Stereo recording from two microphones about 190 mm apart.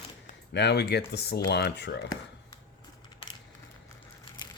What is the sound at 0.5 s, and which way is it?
Speech, 60° left (ahead or behind).